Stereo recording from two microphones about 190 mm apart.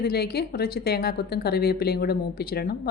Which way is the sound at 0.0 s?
55° left (ahead or behind).